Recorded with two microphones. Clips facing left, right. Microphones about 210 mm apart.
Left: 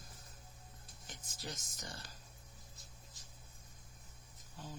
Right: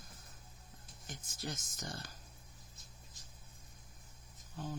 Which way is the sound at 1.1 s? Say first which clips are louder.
Right 4 dB; 45° right (ahead or behind).